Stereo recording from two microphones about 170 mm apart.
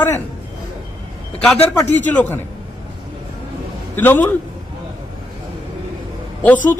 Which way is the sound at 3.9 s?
10° left (ahead or behind).